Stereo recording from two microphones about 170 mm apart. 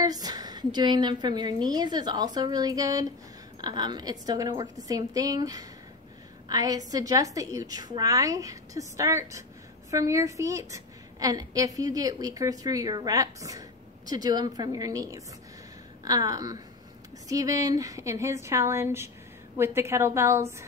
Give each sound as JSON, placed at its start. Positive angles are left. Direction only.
{"t": 0.0, "sound": "a woman's voice", "side_deg": -25}